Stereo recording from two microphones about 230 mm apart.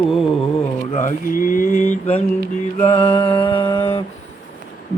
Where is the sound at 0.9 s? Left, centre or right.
Left.